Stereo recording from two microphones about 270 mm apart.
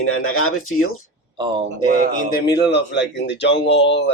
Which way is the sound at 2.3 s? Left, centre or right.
Left.